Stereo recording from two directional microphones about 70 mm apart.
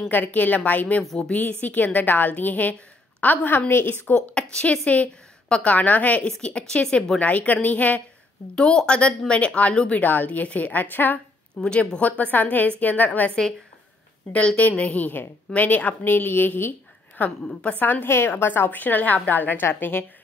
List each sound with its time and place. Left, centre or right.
0.1 s a woman's voice: left
1.0 s a woman's voice: centre
1.3 s a woman's voice: left
4.1 s a woman's voice: centre
11.6 s a woman's voice: centre
14.6 s a woman's voice: left
17.7 s a woman's voice: left